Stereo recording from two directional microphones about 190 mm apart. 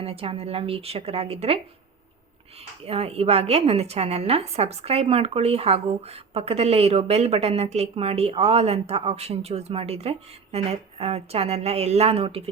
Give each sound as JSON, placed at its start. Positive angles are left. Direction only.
{"t": 0.0, "sound": "a woman's voice", "side_deg": -30}
{"t": 2.8, "sound": "a woman's voice", "side_deg": -30}